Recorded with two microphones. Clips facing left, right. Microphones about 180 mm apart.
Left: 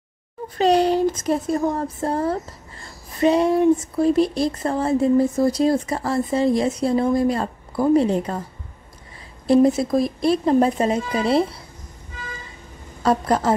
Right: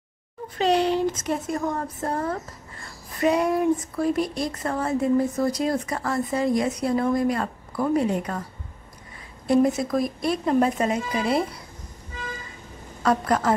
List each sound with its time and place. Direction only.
0.6 s speech: 40° left (ahead or behind)
9.5 s speech: 30° left (ahead or behind)
13.0 s speech: 30° left (ahead or behind)